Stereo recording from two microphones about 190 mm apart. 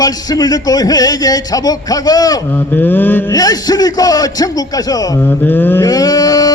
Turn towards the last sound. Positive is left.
turn(degrees=20)  # may be behind; listen again after turning